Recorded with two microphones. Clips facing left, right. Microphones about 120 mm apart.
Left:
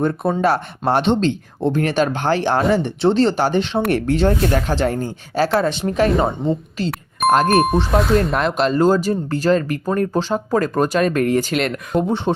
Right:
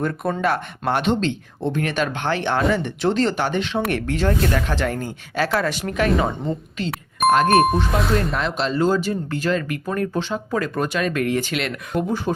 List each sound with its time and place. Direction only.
0.0 s speech: 30° left (ahead or behind)
8.3 s speech: 55° left (ahead or behind)
11.9 s speech: 30° left (ahead or behind)